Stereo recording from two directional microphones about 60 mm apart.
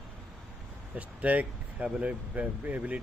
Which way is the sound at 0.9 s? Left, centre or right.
Right.